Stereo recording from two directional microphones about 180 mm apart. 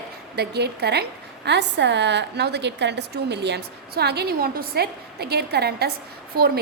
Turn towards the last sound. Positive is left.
turn(degrees=-55)  # may be behind; listen again after turning